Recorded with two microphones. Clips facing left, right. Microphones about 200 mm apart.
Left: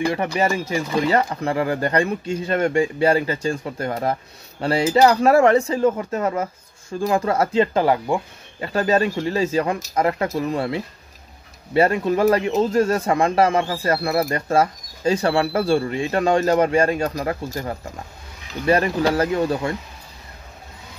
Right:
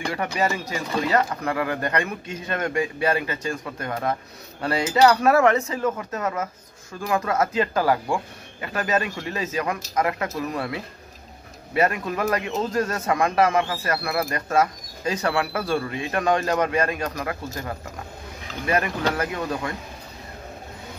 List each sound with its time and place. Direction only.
0.1 s speech: 25° left (ahead or behind)